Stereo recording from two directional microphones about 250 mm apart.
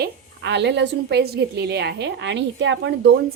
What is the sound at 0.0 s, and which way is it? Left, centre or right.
A woman's voice, right.